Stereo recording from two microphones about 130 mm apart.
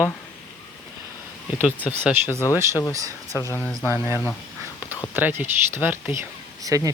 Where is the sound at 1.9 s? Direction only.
10° right (ahead or behind).